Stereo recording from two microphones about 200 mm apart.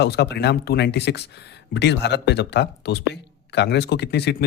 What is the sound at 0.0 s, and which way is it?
Speech, 55° left (ahead or behind).